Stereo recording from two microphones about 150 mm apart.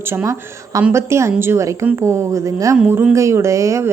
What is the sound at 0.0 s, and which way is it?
A woman's voice, 15° right (ahead or behind).